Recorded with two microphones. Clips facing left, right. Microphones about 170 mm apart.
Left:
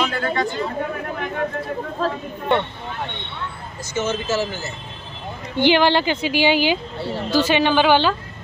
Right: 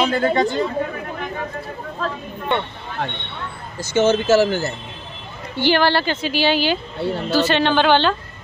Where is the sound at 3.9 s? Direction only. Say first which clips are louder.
Right 8 dB; 75° right (ahead or behind).